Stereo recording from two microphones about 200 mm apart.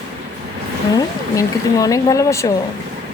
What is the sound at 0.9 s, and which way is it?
Speech, 15° left (ahead or behind).